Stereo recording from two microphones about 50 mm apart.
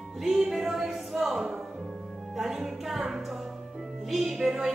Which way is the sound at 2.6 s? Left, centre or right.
Centre.